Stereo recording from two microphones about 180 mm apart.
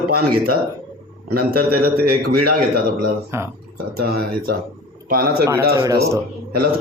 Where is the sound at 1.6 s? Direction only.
55° right (ahead or behind).